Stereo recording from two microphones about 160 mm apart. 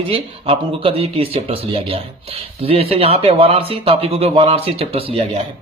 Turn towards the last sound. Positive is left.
turn(degrees=-35)  # may be behind; listen again after turning